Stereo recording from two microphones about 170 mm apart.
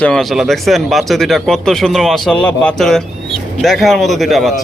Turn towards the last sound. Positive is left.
turn(degrees=0)  # may be behind; listen again after turning